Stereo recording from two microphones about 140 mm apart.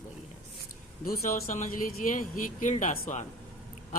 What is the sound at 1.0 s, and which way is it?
Speech, 75° left (ahead or behind).